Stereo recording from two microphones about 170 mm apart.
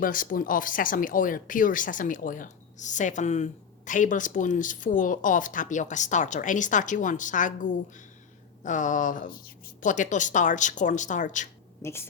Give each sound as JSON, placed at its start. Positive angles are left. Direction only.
{"t": 0.0, "sound": "speech", "side_deg": 55}
{"t": 11.8, "sound": "a woman's voice", "side_deg": 15}